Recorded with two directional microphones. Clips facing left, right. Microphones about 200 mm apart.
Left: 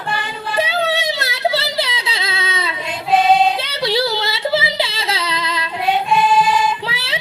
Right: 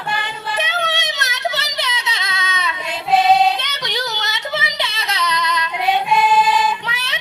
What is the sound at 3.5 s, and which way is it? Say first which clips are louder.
Yodeling: left 7 dB; 30° left (ahead or behind).